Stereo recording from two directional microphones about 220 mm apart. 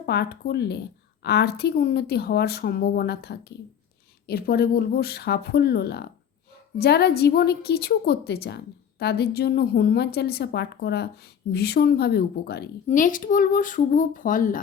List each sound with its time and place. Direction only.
0.0 s a woman's voice: 50° left (ahead or behind)